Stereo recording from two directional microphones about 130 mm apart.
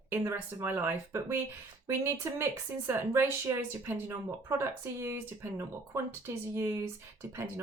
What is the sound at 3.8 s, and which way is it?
Speech, 20° right (ahead or behind).